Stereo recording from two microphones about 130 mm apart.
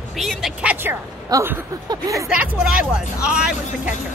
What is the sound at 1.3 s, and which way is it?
Speech, 20° right (ahead or behind).